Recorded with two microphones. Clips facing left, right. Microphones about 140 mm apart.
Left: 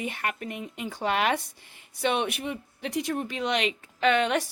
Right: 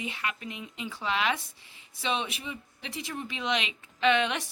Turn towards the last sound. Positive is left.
turn(degrees=45)  # may be behind; listen again after turning